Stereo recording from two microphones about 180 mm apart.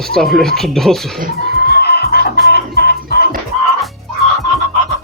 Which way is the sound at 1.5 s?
60° left (ahead or behind).